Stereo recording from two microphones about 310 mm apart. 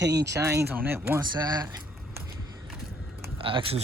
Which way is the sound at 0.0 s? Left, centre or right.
Right.